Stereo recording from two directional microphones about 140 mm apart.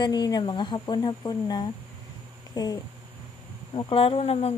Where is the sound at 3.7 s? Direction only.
40° left (ahead or behind).